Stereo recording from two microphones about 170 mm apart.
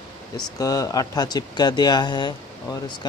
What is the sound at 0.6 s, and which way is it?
Speech, 20° left (ahead or behind).